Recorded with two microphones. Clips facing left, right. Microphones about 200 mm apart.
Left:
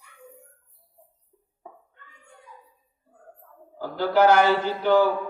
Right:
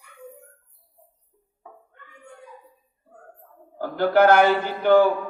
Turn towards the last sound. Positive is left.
turn(degrees=-55)  # may be behind; listen again after turning